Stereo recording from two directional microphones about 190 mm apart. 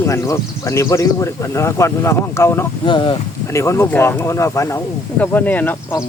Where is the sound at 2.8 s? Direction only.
25° left (ahead or behind).